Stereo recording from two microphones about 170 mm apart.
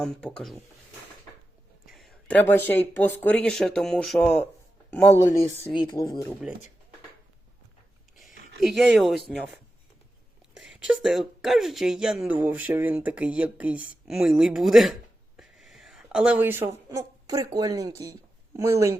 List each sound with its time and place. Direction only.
0.0 s speech: 5° left (ahead or behind)
1.9 s speech: centre (ahead or behind)
5.7 s speech: 25° left (ahead or behind)
8.6 s speech: centre (ahead or behind)
10.6 s a woman's voice: 5° right (ahead or behind)